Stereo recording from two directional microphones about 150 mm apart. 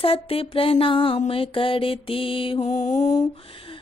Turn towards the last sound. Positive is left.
turn(degrees=55)  # may be behind; listen again after turning